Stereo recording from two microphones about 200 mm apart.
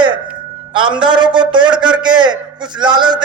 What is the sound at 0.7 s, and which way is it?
A man's voice, 25° right (ahead or behind).